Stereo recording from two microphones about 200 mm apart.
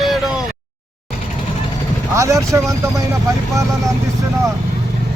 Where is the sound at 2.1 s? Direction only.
15° right (ahead or behind).